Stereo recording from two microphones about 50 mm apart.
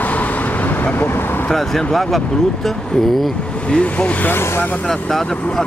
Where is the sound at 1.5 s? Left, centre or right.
Centre.